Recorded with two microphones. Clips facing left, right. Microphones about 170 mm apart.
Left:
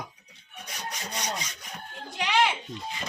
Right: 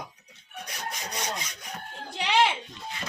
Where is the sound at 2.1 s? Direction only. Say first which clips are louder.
Right 1 dB; 30° right (ahead or behind).